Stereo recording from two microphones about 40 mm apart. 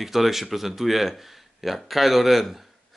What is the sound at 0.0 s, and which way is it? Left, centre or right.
Speech, centre.